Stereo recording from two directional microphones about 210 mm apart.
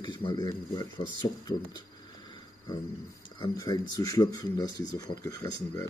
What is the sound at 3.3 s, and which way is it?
Speech, 20° left (ahead or behind).